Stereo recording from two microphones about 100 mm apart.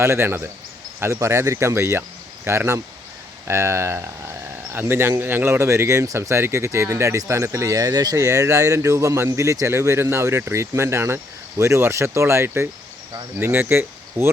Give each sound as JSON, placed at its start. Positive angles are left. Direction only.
{"t": 0.0, "sound": "speech", "side_deg": -25}